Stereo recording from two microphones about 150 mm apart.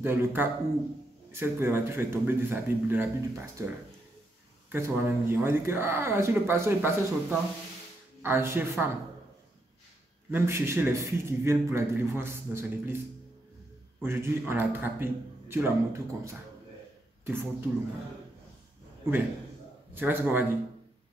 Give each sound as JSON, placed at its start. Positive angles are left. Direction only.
{"t": 0.0, "sound": "speech", "side_deg": -15}
{"t": 4.6, "sound": "speech", "side_deg": -15}
{"t": 10.3, "sound": "speech", "side_deg": -15}
{"t": 14.0, "sound": "speech", "side_deg": -15}
{"t": 19.9, "sound": "speech", "side_deg": -15}